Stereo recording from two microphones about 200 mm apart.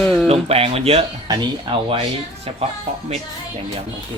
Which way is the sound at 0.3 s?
30° right (ahead or behind).